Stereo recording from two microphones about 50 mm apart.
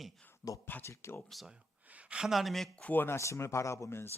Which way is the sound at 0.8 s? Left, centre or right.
Left.